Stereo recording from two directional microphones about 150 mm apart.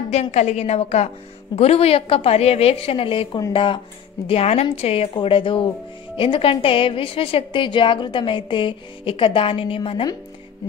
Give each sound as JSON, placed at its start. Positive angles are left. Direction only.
{"t": 0.1, "sound": "a woman's voice", "side_deg": 45}
{"t": 4.3, "sound": "a woman's voice", "side_deg": 45}